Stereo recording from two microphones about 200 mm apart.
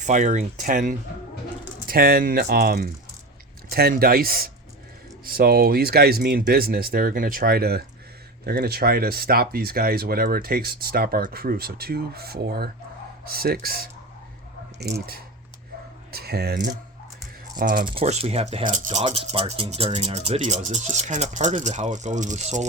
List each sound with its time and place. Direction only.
0.0 s speech: 40° right (ahead or behind)
17.6 s speech: 45° right (ahead or behind)
17.8 s speech: 30° right (ahead or behind)